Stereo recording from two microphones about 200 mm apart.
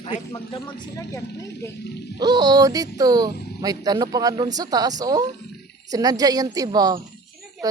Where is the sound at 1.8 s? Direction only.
55° left (ahead or behind).